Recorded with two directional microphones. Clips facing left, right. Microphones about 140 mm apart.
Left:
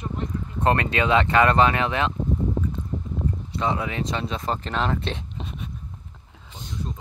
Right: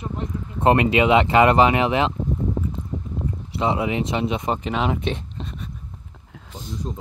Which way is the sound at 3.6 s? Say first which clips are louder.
Right 5 dB; 20° right (ahead or behind).